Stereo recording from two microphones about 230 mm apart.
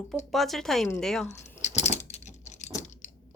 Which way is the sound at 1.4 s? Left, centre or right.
Left.